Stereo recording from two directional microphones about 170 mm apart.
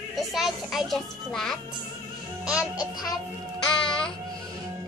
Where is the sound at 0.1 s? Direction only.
Centre (ahead or behind).